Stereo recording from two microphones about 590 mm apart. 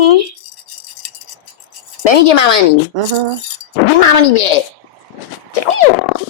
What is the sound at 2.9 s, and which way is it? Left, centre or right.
Speech, right.